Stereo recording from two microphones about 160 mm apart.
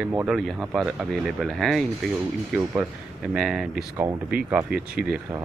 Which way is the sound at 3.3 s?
5° right (ahead or behind).